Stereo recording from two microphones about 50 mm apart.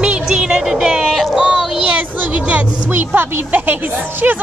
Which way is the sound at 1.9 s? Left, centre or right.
Right.